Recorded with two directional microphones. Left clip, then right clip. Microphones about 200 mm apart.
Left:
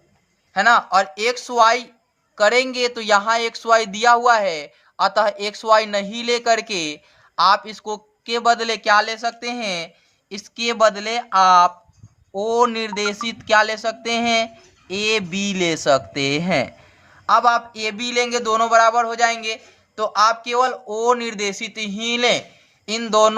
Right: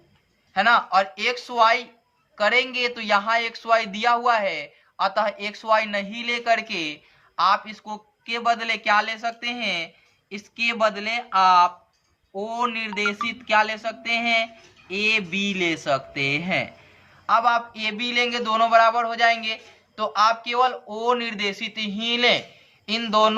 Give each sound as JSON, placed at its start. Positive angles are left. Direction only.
{"t": 0.5, "sound": "speech", "side_deg": 40}
{"t": 12.3, "sound": "music", "side_deg": 55}
{"t": 17.2, "sound": "speech", "side_deg": 45}